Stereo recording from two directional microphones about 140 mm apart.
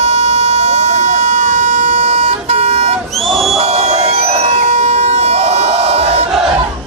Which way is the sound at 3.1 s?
Centre (ahead or behind).